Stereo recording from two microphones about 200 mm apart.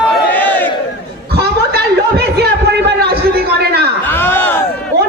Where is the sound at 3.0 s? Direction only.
50° right (ahead or behind).